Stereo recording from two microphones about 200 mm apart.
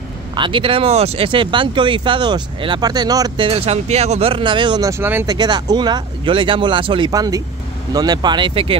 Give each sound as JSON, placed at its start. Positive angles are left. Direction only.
{"t": 0.3, "sound": "speech", "side_deg": -25}